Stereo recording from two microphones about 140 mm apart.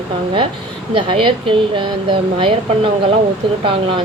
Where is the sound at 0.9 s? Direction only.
40° right (ahead or behind).